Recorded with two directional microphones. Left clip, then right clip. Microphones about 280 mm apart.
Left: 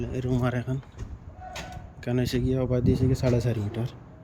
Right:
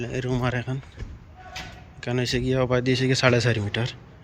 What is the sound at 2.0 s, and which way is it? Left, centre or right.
Speech, centre.